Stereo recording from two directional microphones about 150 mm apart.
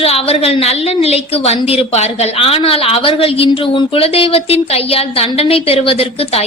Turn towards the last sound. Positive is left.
turn(degrees=40)  # may be behind; listen again after turning